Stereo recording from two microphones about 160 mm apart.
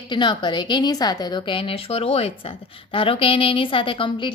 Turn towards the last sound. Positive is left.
turn(degrees=30)  # may be behind; listen again after turning